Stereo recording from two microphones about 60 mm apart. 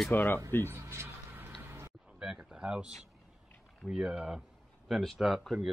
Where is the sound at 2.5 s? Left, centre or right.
Centre.